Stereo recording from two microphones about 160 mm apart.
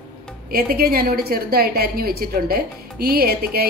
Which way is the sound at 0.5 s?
65° right (ahead or behind).